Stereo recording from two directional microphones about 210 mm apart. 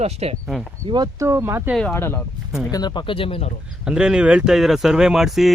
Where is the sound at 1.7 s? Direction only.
10° left (ahead or behind); by 3.5 s 30° left (ahead or behind).